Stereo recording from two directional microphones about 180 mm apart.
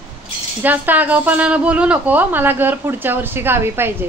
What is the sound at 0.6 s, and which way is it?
Speech, 10° right (ahead or behind).